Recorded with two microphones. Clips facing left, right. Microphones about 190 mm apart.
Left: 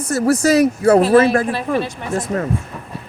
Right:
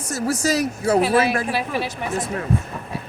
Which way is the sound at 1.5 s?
5° right (ahead or behind).